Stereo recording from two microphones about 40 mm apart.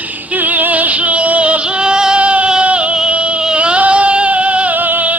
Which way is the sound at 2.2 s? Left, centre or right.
Right.